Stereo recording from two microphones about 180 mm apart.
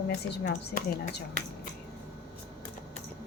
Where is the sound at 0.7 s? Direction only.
50° left (ahead or behind).